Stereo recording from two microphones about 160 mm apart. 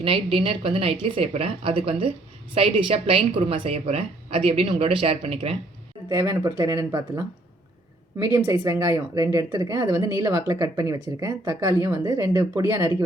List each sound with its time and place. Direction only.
0.0 s a woman's voice: 35° right (ahead or behind)
6.1 s a woman's voice: 20° right (ahead or behind)